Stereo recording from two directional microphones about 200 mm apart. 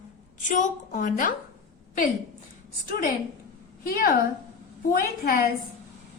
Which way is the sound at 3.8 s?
45° left (ahead or behind).